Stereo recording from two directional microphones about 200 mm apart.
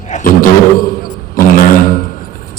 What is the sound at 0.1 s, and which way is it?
Beatboxing, 40° left (ahead or behind).